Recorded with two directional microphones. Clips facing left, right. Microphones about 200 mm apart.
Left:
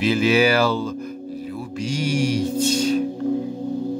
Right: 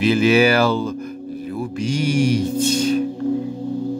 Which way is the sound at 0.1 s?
55° right (ahead or behind).